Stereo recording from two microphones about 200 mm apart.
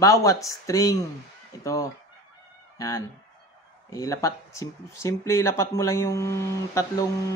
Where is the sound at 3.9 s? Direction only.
15° left (ahead or behind).